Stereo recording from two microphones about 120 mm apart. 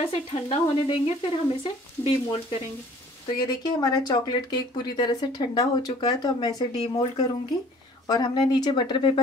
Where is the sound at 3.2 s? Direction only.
35° left (ahead or behind).